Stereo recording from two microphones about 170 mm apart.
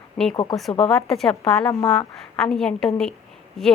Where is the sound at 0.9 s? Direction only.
Centre (ahead or behind).